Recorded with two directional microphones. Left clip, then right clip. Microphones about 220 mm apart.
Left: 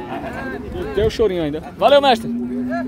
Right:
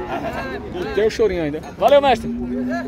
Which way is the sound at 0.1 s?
45° right (ahead or behind).